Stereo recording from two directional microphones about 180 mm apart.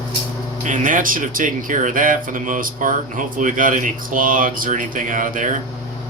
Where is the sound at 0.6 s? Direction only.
45° right (ahead or behind).